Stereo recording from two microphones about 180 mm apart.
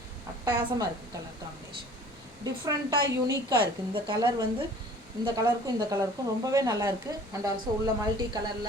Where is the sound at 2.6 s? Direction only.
20° right (ahead or behind).